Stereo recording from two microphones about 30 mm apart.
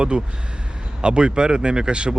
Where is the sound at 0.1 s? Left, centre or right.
Right.